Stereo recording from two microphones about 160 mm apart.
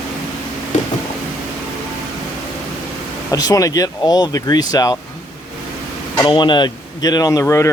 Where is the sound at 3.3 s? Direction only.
20° left (ahead or behind).